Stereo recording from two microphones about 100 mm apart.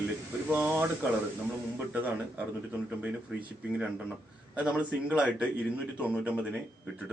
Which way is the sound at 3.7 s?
10° right (ahead or behind).